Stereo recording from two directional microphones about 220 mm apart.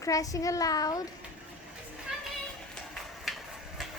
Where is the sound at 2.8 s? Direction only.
5° left (ahead or behind).